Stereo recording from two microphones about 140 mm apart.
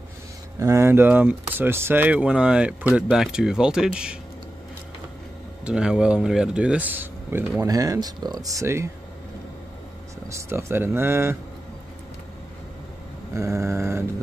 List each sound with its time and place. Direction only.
0.6 s speech: 20° right (ahead or behind); by 4.2 s 5° right (ahead or behind)
5.7 s speech: 5° right (ahead or behind)
7.6 s speech: 25° right (ahead or behind)
10.2 s speech: 20° right (ahead or behind)
13.3 s speech: 20° right (ahead or behind)